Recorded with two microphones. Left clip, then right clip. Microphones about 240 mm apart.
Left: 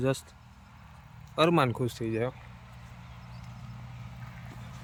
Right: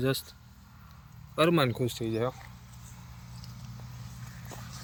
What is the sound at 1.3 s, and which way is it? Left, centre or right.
Speech, centre.